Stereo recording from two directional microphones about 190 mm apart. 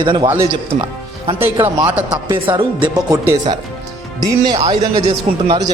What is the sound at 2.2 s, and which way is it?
A man's voice, 25° right (ahead or behind).